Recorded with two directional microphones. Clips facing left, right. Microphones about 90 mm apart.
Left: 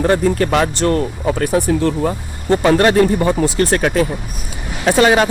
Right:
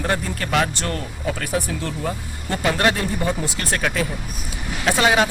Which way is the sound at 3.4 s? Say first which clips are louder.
Left 9 dB; 35° left (ahead or behind).